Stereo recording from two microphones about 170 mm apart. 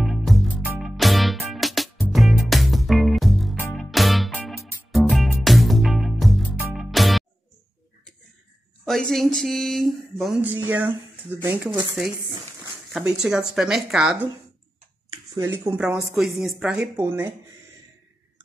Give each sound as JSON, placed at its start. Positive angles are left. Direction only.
{"t": 0.0, "sound": "music", "side_deg": 0}
{"t": 8.8, "sound": "speech", "side_deg": 0}
{"t": 15.3, "sound": "speech", "side_deg": -15}
{"t": 15.8, "sound": "speech", "side_deg": -5}